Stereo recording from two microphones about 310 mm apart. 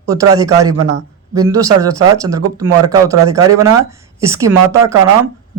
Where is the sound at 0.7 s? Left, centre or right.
Right.